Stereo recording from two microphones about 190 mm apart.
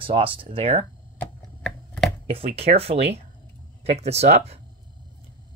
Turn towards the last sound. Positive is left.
turn(degrees=-35)  # may be behind; listen again after turning